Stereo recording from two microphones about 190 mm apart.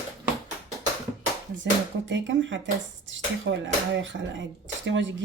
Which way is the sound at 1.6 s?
75° right (ahead or behind).